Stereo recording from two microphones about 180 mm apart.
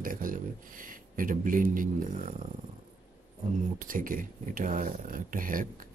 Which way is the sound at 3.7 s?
50° right (ahead or behind).